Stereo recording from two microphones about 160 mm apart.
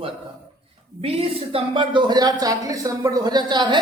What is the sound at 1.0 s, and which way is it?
Speech, 35° right (ahead or behind).